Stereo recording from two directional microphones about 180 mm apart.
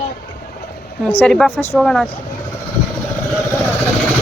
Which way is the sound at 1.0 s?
5° left (ahead or behind).